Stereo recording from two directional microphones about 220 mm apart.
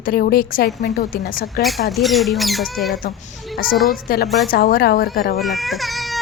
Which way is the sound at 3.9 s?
40° left (ahead or behind).